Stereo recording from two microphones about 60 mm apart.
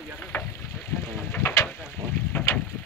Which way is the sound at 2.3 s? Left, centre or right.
Left.